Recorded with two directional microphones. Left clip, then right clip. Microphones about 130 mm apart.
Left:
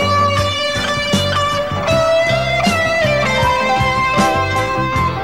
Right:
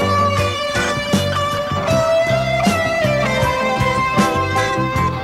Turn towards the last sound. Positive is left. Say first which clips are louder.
# left 1 dB
turn(degrees=20)  # may be behind; listen again after turning